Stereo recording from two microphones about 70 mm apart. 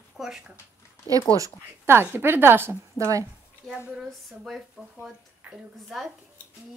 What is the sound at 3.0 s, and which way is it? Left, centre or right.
Speech, right.